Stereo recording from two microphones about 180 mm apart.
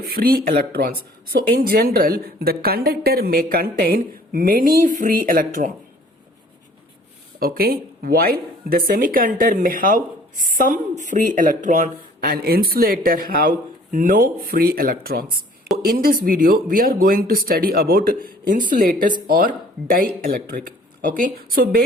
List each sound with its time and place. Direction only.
0.0 s speech: 55° right (ahead or behind)
7.3 s speech: 55° right (ahead or behind)